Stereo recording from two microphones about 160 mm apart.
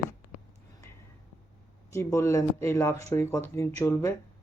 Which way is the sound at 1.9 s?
15° left (ahead or behind).